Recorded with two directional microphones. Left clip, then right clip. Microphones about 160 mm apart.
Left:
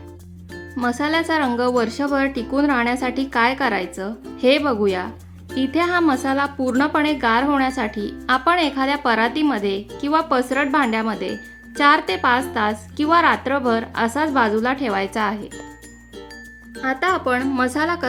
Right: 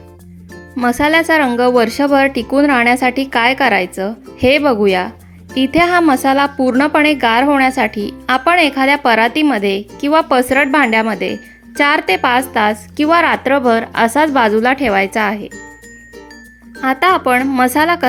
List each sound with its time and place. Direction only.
0.8 s a woman's voice: 30° right (ahead or behind)
16.8 s a woman's voice: 45° right (ahead or behind)